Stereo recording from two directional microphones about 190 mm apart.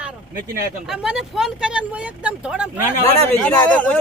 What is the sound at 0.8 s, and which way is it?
Speech, 5° right (ahead or behind).